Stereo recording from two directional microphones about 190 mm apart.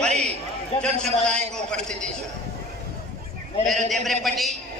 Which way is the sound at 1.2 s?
5° left (ahead or behind).